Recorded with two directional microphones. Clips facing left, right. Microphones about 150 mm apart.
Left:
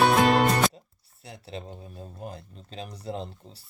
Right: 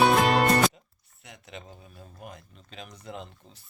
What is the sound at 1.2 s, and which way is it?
Speech, 30° left (ahead or behind).